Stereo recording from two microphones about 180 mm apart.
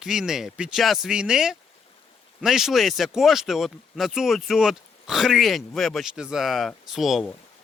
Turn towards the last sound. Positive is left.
turn(degrees=0)  # may be behind; listen again after turning